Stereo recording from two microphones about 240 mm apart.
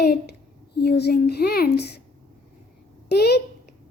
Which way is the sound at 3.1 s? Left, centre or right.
Left.